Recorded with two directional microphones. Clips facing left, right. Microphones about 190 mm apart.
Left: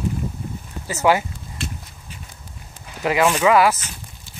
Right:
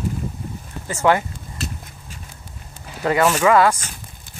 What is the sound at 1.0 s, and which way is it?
Speech, 10° left (ahead or behind).